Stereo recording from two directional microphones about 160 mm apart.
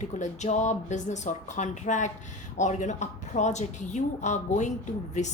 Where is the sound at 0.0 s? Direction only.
50° left (ahead or behind).